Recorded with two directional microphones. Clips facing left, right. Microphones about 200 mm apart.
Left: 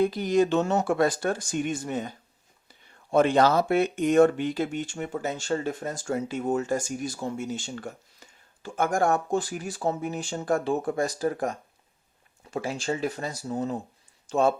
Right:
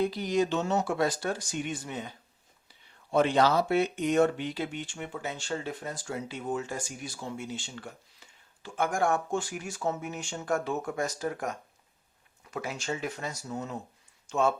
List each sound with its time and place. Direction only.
0.0 s speech: 50° left (ahead or behind); by 14.5 s 35° left (ahead or behind)